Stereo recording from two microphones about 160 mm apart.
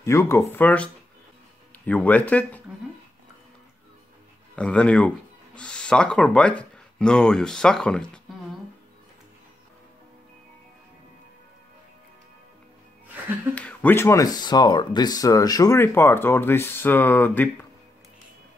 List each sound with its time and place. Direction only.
0.0 s speech: 15° left (ahead or behind)
1.9 s speech: 10° left (ahead or behind)
4.6 s speech: 5° left (ahead or behind)
13.6 s speech: 10° left (ahead or behind)